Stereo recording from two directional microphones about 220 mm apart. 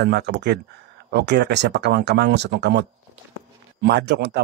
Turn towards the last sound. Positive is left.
turn(degrees=-50)  # may be behind; listen again after turning